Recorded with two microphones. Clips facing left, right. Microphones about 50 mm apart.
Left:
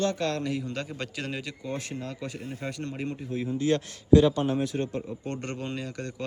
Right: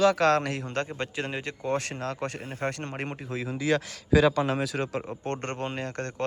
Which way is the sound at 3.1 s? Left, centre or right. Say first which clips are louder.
Left 2 dB; right.